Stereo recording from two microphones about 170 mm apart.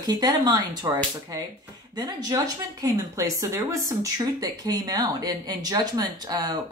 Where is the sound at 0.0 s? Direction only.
25° right (ahead or behind).